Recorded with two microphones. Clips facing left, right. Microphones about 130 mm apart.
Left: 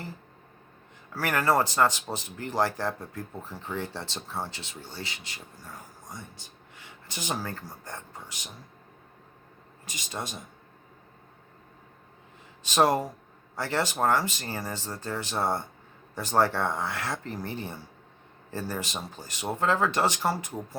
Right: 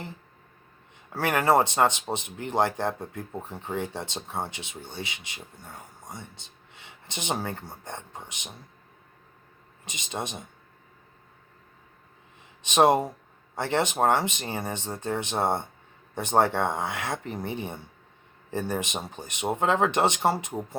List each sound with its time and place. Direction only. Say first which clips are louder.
1.1 s speech: right 3 dB; 25° right (ahead or behind)
9.8 s speech: right 3 dB; 20° right (ahead or behind)
12.6 s speech: right 3 dB; 20° right (ahead or behind)